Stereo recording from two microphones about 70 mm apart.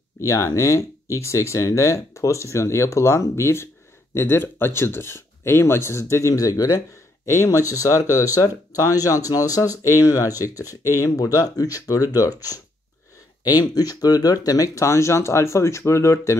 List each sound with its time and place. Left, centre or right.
0.2 s speech: left
7.2 s speech: left
11.1 s speech: left